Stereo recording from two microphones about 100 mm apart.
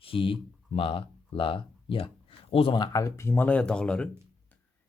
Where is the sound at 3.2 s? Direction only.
15° left (ahead or behind).